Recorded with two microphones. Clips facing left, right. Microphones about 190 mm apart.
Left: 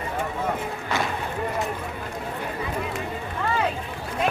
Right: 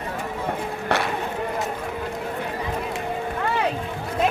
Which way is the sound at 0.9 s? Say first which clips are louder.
Right 3 dB; 65° right (ahead or behind).